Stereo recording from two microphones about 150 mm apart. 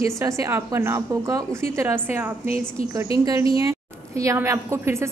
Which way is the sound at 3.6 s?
20° right (ahead or behind).